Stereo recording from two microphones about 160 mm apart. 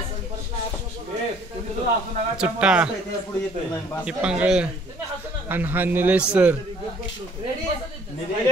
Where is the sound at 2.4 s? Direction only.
5° right (ahead or behind).